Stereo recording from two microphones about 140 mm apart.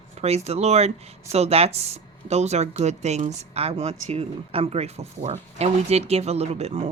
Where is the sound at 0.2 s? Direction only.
50° right (ahead or behind).